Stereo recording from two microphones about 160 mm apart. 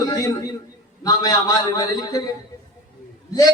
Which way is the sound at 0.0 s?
20° left (ahead or behind).